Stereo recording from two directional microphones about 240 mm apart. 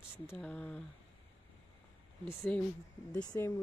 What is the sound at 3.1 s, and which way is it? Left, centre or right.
Speech, centre.